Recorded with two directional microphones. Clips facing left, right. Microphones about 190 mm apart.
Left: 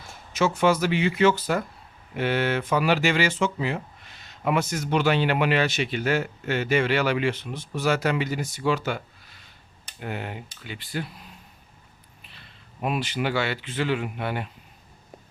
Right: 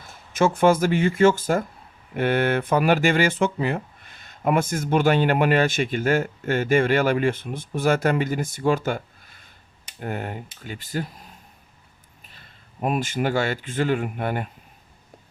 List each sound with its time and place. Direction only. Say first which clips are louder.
0.3 s speech: right 3 dB; 50° right (ahead or behind)
12.2 s speech: even; 45° right (ahead or behind)